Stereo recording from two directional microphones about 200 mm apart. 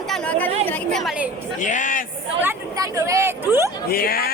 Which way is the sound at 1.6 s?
40° left (ahead or behind).